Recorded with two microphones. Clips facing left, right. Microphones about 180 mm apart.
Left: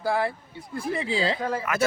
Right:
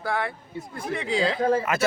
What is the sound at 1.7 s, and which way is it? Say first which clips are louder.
Speech: even; 25° right (ahead or behind).